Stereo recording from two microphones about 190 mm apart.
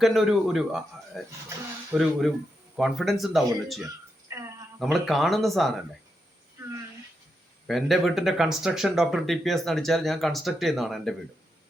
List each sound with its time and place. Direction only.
0.0 s speech: centre (ahead or behind)
4.3 s a sound: 15° right (ahead or behind)
4.8 s speech: centre (ahead or behind)
7.7 s speech: centre (ahead or behind)